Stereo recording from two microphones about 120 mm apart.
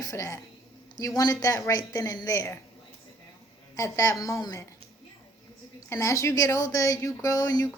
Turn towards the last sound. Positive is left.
turn(degrees=30)  # may be behind; listen again after turning